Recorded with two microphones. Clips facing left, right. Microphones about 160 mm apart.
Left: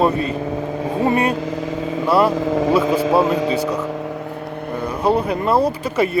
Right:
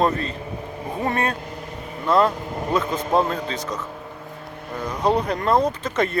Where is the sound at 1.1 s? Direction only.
10° left (ahead or behind).